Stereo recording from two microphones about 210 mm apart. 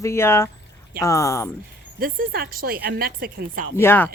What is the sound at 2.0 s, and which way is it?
A woman's voice, 45° right (ahead or behind).